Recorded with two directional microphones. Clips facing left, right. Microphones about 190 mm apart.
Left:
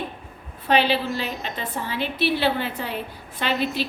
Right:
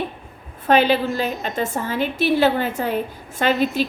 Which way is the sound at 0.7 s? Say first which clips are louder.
Right 4 dB; 45° right (ahead or behind).